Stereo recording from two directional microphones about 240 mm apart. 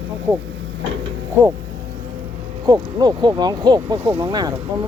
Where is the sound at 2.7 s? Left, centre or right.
Centre.